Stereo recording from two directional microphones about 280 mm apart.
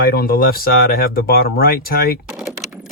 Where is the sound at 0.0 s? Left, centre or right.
Left.